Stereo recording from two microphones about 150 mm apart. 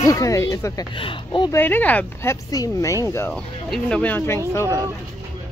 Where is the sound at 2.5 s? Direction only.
20° left (ahead or behind).